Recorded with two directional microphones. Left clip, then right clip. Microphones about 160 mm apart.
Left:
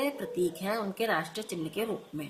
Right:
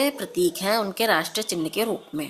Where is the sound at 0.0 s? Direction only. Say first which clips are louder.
Right 7 dB; 45° right (ahead or behind).